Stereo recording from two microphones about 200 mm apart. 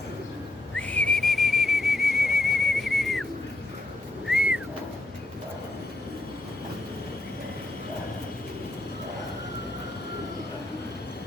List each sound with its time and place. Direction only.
0.8 s whistle: 5° left (ahead or behind)
4.3 s bird: 5° right (ahead or behind)